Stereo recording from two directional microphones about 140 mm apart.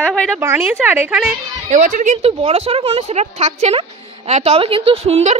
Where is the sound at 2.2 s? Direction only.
45° right (ahead or behind).